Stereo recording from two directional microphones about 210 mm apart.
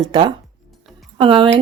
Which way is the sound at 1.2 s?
25° right (ahead or behind).